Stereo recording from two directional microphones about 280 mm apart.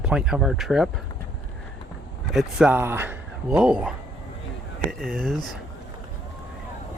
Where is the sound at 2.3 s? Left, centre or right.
Centre.